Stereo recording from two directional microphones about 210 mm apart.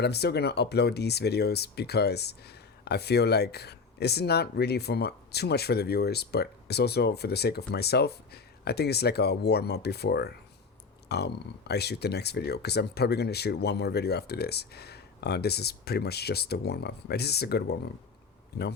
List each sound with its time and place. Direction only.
0.0 s speech: 50° left (ahead or behind)